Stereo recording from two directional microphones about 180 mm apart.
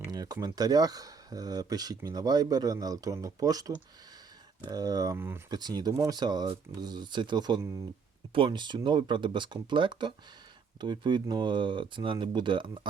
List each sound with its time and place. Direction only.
0.1 s speech: 20° right (ahead or behind)
4.7 s speech: 20° right (ahead or behind)